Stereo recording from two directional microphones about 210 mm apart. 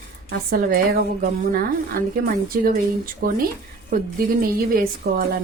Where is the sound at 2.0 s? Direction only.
45° right (ahead or behind).